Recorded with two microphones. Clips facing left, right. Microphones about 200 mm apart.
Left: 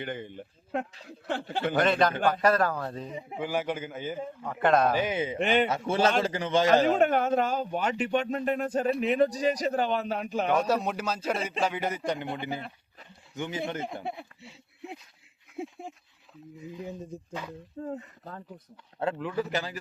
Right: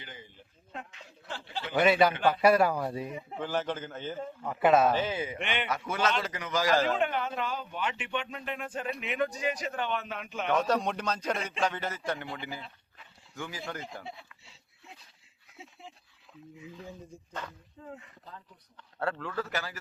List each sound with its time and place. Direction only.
0.0 s speech: 60° left (ahead or behind)
1.8 s speech: 10° right (ahead or behind)
3.2 s a man's voice: 10° left (ahead or behind)
4.4 s a man's voice: 5° right (ahead or behind)
4.9 s a man's voice: 15° left (ahead or behind)
5.4 s a man's voice: 35° left (ahead or behind)
6.8 s speech: 45° left (ahead or behind)
10.5 s a man's voice: 5° left (ahead or behind)
13.8 s speech: 55° left (ahead or behind)
15.5 s a sound: 50° left (ahead or behind)
17.7 s speech: 45° left (ahead or behind)
18.9 s a man's voice: 15° left (ahead or behind)